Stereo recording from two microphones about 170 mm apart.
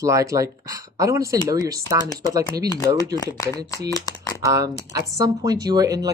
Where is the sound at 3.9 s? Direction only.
20° left (ahead or behind).